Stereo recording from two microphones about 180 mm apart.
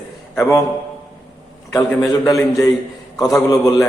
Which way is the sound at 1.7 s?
15° left (ahead or behind).